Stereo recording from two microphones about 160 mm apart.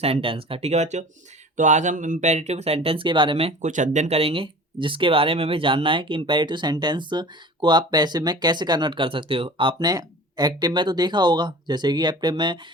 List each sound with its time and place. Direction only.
0.0 s speech: 35° right (ahead or behind)